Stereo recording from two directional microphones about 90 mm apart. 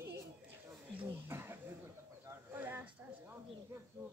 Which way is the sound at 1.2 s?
25° right (ahead or behind).